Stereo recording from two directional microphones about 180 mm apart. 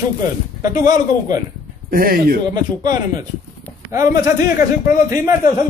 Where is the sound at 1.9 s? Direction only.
55° right (ahead or behind).